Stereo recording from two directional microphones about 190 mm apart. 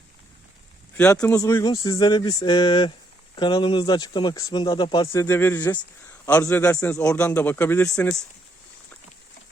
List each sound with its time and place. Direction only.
1.4 s speech: 20° left (ahead or behind)
6.7 s speech: 5° left (ahead or behind)